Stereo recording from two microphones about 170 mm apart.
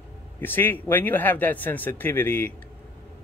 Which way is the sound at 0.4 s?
10° left (ahead or behind).